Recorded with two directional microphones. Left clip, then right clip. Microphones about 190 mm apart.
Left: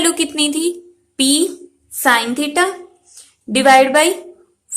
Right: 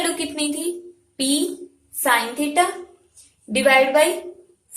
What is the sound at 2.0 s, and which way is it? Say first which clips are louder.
A woman's voice: left 5 dB; 50° left (ahead or behind).